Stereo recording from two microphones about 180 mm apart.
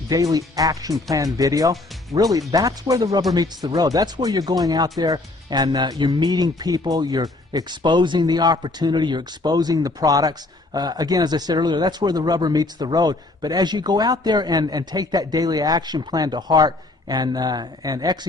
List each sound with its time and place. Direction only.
0.1 s speech: 20° right (ahead or behind)